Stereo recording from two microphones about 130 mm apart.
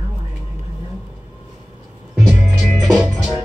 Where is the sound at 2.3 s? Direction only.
Centre (ahead or behind).